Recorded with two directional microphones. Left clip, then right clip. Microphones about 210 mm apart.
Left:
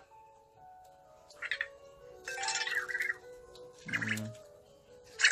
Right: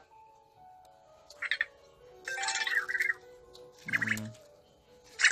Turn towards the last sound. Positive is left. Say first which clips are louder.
# right 2 dB
turn(degrees=-15)  # may be behind; listen again after turning